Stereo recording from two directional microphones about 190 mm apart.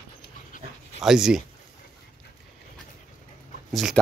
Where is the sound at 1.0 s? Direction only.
5° right (ahead or behind).